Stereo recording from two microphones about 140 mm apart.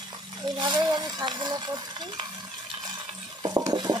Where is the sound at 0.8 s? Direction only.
30° right (ahead or behind).